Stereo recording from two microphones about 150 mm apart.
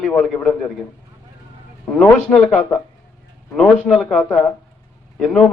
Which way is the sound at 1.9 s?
5° left (ahead or behind).